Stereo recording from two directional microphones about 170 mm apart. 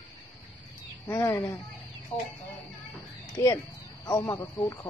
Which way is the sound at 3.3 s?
20° left (ahead or behind).